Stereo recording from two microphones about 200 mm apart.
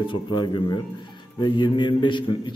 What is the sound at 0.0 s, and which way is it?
A man's voice, 25° left (ahead or behind).